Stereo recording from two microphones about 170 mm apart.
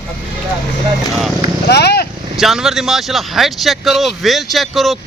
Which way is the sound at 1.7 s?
75° left (ahead or behind).